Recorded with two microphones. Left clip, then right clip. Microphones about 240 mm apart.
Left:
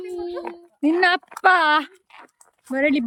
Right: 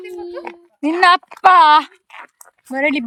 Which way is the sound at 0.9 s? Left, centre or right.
Centre.